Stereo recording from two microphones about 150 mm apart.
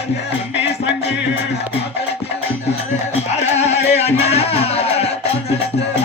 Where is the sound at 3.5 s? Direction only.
45° left (ahead or behind).